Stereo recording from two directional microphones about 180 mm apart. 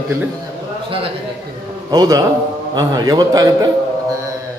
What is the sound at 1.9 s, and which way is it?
A man's voice, 20° right (ahead or behind).